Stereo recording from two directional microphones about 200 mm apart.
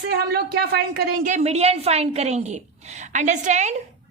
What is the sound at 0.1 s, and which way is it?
A woman's voice, 50° right (ahead or behind).